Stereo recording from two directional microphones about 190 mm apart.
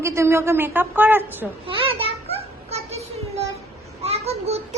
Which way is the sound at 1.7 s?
30° right (ahead or behind).